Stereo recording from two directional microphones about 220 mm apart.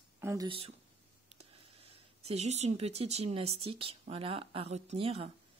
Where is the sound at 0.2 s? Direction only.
15° right (ahead or behind).